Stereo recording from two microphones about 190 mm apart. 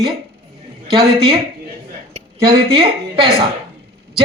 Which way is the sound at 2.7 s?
25° right (ahead or behind).